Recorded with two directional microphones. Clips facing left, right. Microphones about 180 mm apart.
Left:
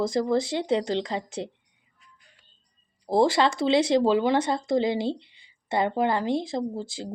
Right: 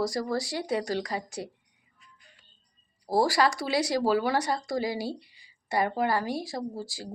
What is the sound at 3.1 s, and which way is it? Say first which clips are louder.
Speech: left 3 dB; 25° left (ahead or behind).